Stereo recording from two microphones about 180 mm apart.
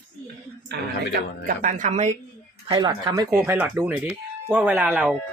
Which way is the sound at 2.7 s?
25° right (ahead or behind).